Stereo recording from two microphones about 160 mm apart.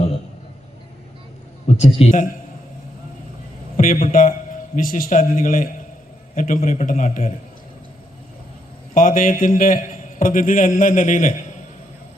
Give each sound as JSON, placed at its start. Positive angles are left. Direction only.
{"t": 1.6, "sound": "a man's voice", "side_deg": 40}
{"t": 3.8, "sound": "a sound", "side_deg": 60}
{"t": 4.1, "sound": "a man's voice", "side_deg": 55}
{"t": 9.0, "sound": "a man's voice", "side_deg": 60}